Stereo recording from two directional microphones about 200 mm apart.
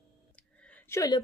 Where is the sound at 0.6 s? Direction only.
10° left (ahead or behind).